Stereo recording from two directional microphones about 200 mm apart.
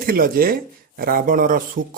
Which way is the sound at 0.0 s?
45° right (ahead or behind).